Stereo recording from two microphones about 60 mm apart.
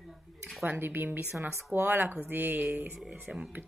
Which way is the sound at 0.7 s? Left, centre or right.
Right.